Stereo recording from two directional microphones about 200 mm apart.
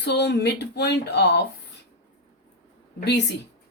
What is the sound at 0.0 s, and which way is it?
Speech, 55° left (ahead or behind).